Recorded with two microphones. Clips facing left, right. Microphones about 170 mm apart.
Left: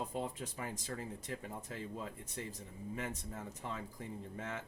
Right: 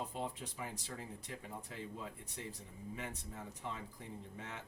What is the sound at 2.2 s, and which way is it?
Speech, 45° left (ahead or behind).